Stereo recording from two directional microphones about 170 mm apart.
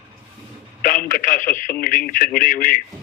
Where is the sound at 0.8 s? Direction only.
55° left (ahead or behind).